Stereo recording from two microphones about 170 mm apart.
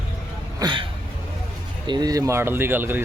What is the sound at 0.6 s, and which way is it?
Speech, 30° right (ahead or behind).